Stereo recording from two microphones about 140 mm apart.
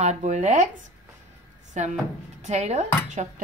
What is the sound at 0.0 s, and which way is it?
Speech, 55° right (ahead or behind).